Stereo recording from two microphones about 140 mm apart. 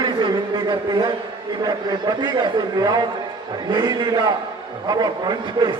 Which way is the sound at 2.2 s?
30° right (ahead or behind).